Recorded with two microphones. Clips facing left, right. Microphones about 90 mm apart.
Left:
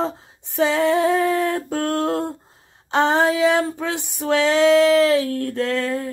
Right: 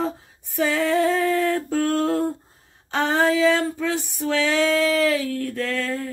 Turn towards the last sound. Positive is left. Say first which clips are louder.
# left 4 dB
turn(degrees=20)  # may be behind; listen again after turning